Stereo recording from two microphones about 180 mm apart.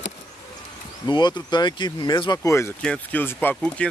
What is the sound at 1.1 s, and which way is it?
Speech, 25° left (ahead or behind).